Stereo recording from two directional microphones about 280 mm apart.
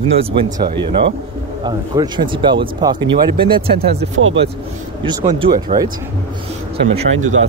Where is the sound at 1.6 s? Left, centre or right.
Centre.